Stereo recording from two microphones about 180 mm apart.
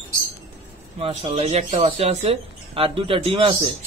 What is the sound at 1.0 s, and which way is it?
Speech, 35° right (ahead or behind).